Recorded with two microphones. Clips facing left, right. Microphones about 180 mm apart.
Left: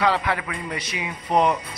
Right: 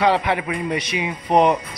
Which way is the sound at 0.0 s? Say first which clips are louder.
Right 4 dB; 20° right (ahead or behind).